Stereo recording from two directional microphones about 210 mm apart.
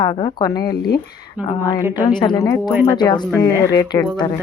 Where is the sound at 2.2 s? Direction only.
20° left (ahead or behind).